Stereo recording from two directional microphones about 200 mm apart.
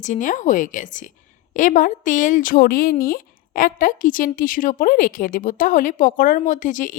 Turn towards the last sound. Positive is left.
turn(degrees=40)  # may be behind; listen again after turning